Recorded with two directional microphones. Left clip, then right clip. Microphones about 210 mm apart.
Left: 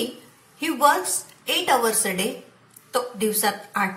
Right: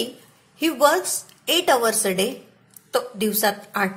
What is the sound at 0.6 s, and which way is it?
A woman's voice, 45° right (ahead or behind).